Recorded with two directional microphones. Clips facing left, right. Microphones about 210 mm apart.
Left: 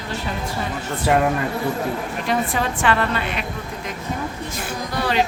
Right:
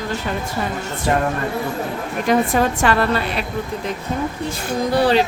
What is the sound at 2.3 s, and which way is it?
A woman's voice, 40° right (ahead or behind).